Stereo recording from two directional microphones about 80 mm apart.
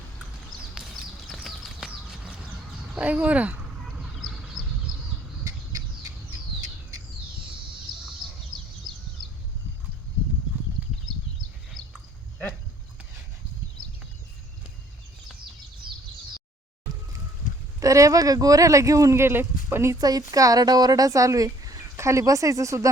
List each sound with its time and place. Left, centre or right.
1.3 s horse: centre
2.9 s speech: centre
3.8 s a sound: centre
7.9 s a sound: right
17.7 s speech: right
19.2 s speech: right
19.9 s speech: right